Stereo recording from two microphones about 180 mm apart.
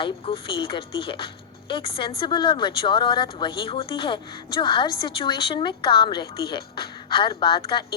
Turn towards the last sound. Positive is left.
turn(degrees=25)  # may be behind; listen again after turning